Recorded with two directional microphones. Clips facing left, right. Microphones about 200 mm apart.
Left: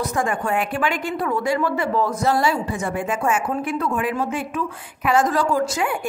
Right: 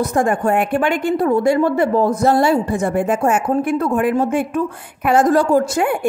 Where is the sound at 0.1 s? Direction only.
50° right (ahead or behind).